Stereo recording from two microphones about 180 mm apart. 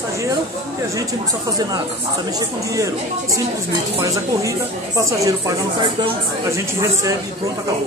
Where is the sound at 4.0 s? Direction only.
15° right (ahead or behind).